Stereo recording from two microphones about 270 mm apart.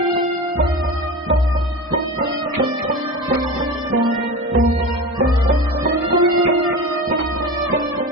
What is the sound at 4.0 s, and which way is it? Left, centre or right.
Music, centre.